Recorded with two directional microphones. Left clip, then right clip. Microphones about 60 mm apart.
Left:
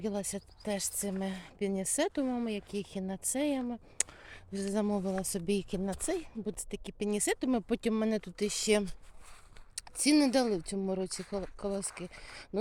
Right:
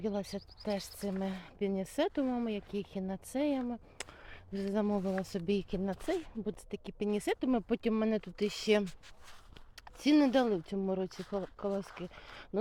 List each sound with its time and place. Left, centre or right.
0.0 s speech: left
3.7 s a sound: left
5.5 s speech: left
6.7 s speech: left